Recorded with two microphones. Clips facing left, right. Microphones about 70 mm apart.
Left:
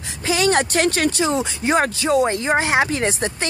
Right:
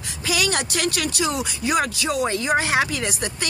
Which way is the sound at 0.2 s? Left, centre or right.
Left.